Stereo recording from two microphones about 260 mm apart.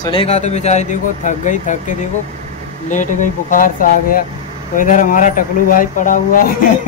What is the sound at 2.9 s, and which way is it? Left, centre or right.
Speech, left.